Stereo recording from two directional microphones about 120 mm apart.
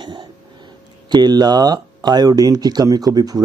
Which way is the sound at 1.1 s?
35° right (ahead or behind).